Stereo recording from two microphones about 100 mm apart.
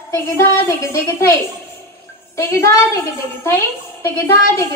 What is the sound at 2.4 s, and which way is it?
A woman's voice, 30° left (ahead or behind).